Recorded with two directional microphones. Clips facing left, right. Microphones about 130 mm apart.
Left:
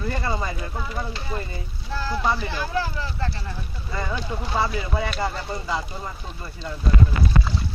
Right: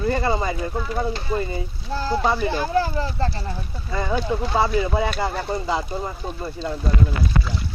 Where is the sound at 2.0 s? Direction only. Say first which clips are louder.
Right 4 dB; 30° right (ahead or behind).